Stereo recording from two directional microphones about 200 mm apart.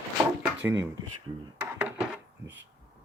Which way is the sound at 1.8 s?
5° right (ahead or behind).